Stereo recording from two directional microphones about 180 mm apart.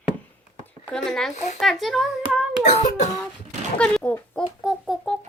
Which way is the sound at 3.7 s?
5° left (ahead or behind).